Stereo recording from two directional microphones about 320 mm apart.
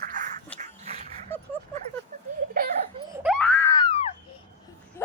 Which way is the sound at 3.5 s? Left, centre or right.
Centre.